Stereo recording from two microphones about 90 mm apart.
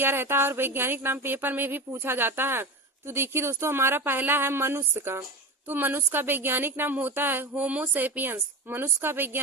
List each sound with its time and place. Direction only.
0.0 s speech: 25° right (ahead or behind)